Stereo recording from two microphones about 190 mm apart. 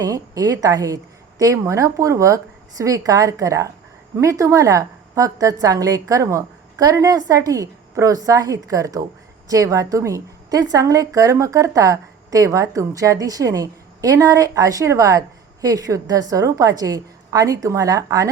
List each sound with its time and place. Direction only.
0.0 s a woman's voice: 20° right (ahead or behind)